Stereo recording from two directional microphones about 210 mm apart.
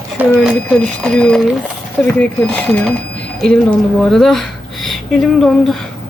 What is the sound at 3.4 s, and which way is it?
Speech, 5° left (ahead or behind).